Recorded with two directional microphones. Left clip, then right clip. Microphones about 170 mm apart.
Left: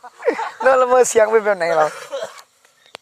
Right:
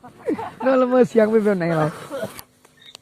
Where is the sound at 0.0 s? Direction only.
85° left; by 1.9 s 50° left (ahead or behind).